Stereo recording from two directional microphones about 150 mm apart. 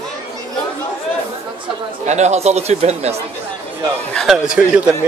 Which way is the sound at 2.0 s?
50° right (ahead or behind).